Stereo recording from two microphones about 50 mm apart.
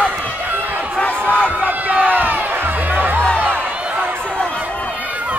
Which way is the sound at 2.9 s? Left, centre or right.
Right.